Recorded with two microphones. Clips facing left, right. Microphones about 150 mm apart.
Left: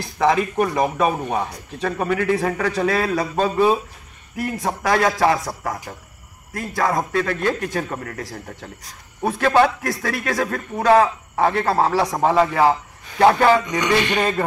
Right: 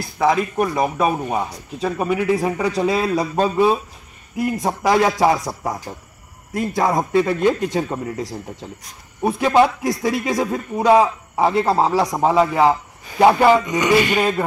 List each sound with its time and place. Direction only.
0.0 s speech: 5° right (ahead or behind); by 5.5 s 20° right (ahead or behind)
6.5 s a man's voice: 20° right (ahead or behind)